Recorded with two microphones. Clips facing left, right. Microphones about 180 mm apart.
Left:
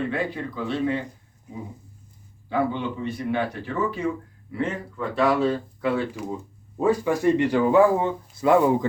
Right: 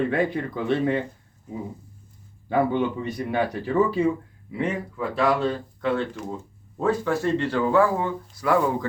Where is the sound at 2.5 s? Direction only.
45° right (ahead or behind).